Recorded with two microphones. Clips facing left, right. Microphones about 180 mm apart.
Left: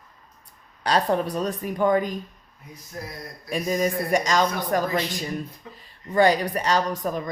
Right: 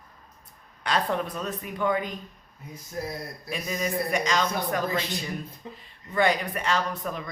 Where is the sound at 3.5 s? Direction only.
45° left (ahead or behind).